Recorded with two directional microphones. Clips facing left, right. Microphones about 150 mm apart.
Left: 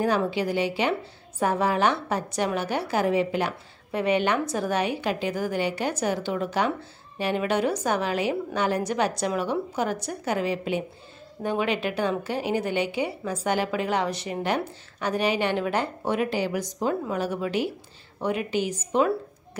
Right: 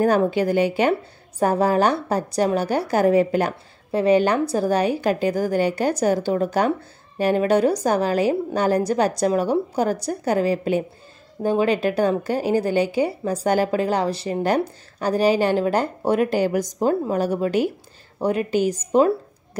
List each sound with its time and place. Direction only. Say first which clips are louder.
0.0 s a woman's voice: right 6 dB; 45° right (ahead or behind)